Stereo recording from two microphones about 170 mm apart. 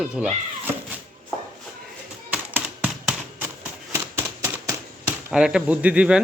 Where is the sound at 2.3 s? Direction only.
10° right (ahead or behind).